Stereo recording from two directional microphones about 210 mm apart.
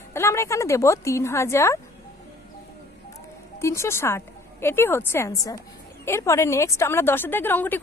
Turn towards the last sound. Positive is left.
turn(degrees=10)  # may be behind; listen again after turning